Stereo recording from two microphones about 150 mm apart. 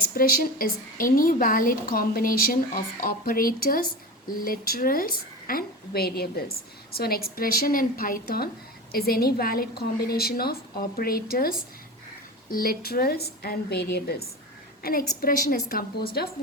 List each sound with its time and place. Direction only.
0.1 s a woman's voice: 75° left (ahead or behind)
8.9 s a woman's voice: 90° left
12.5 s a woman's voice: 85° left